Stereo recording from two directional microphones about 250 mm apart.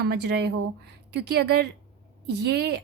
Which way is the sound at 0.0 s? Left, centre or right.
Right.